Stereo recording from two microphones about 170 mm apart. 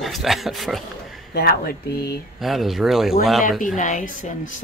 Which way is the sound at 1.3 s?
65° left (ahead or behind).